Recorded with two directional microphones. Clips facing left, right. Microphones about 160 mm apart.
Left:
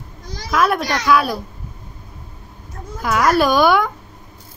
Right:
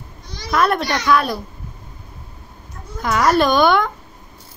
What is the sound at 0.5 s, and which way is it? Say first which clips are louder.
Speech: even; 5° left (ahead or behind).